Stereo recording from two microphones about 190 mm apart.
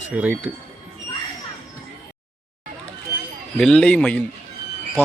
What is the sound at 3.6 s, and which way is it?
Speech, 5° left (ahead or behind).